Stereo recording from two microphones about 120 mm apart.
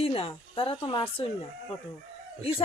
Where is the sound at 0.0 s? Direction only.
55° left (ahead or behind).